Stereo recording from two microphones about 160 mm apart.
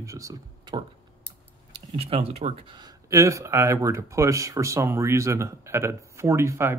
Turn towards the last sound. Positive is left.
turn(degrees=-15)  # may be behind; listen again after turning